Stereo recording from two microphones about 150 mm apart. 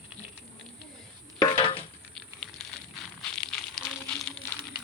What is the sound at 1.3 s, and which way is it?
Dishes, 25° left (ahead or behind).